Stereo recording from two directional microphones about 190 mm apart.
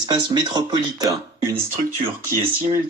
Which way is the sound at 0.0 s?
25° right (ahead or behind).